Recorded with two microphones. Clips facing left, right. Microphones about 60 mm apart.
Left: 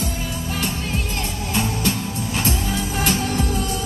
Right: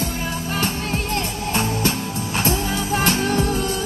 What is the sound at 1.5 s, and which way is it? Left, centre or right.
Music, right.